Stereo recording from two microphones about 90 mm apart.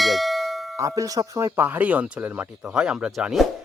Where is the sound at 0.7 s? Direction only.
40° right (ahead or behind); by 2.5 s 15° right (ahead or behind).